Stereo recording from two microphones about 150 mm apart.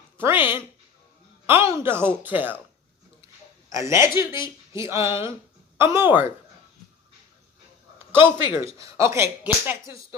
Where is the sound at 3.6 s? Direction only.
20° right (ahead or behind).